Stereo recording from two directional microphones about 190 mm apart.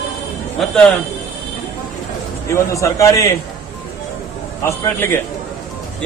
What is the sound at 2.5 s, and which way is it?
Speech, 15° left (ahead or behind).